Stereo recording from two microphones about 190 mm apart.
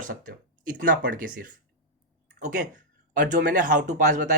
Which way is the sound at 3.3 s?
45° right (ahead or behind).